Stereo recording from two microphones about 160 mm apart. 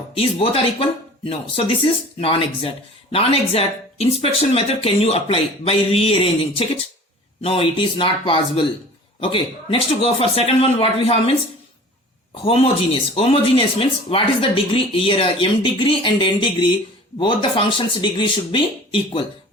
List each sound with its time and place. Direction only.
0.1 s speech: 35° left (ahead or behind)
12.5 s speech: 35° left (ahead or behind)